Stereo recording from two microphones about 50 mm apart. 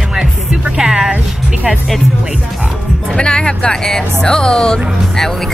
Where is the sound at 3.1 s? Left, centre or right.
Centre.